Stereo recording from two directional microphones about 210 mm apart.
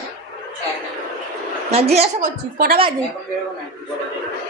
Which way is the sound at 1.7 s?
30° right (ahead or behind).